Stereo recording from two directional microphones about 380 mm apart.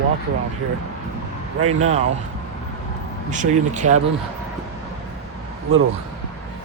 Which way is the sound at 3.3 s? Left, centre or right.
Centre.